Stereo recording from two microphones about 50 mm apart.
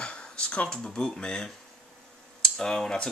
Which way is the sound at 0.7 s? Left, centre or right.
Centre.